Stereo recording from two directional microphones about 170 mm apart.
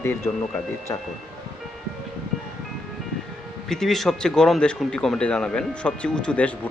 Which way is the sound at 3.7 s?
5° left (ahead or behind).